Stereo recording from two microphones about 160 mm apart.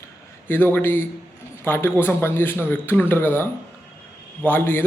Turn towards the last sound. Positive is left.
turn(degrees=10)  # may be behind; listen again after turning